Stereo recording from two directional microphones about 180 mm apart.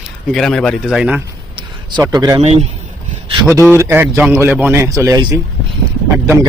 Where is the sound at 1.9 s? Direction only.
25° right (ahead or behind).